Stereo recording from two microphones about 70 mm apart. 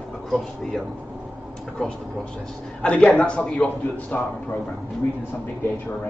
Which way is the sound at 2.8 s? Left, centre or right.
Centre.